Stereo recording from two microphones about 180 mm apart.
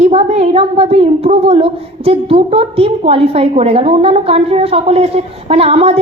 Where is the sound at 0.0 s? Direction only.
35° right (ahead or behind).